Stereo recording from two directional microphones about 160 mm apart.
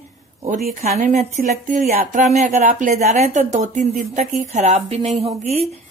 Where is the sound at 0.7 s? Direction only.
50° right (ahead or behind).